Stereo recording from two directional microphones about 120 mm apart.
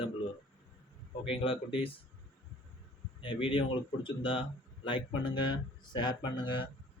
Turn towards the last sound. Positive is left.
turn(degrees=45)  # may be behind; listen again after turning